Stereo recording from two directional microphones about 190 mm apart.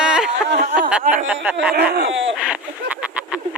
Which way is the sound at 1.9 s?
70° right (ahead or behind).